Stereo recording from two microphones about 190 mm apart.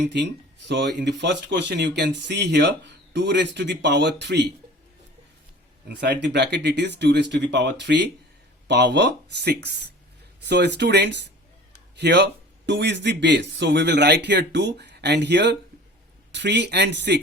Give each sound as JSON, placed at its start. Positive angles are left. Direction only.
{"t": 0.0, "sound": "speech", "side_deg": -65}
{"t": 5.9, "sound": "speech", "side_deg": -60}